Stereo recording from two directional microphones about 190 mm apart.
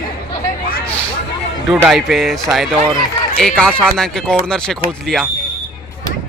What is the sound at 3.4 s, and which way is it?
Speech, 5° left (ahead or behind).